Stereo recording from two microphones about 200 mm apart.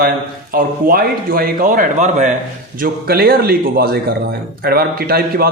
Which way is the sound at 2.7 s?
45° right (ahead or behind).